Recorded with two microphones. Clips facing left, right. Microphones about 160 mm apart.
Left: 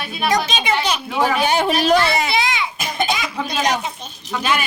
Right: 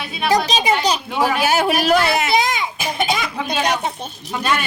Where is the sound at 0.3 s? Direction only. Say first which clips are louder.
Right 3 dB; 35° right (ahead or behind).